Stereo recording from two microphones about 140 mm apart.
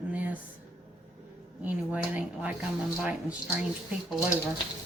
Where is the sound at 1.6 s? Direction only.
10° right (ahead or behind).